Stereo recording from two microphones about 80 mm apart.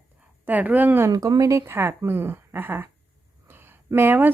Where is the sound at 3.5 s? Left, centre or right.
Right.